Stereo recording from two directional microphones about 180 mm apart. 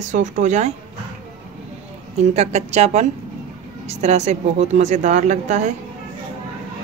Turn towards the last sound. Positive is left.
turn(degrees=-40)  # may be behind; listen again after turning